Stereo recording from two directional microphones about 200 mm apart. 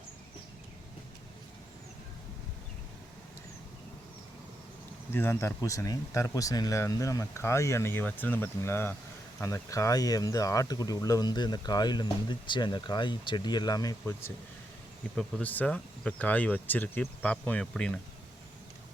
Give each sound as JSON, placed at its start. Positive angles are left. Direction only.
{"t": 5.1, "sound": "speech", "side_deg": 10}